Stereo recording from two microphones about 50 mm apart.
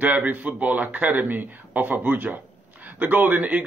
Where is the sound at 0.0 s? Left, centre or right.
Right.